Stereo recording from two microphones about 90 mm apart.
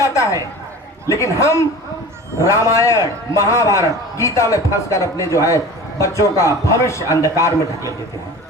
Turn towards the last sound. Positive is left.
turn(degrees=35)  # may be behind; listen again after turning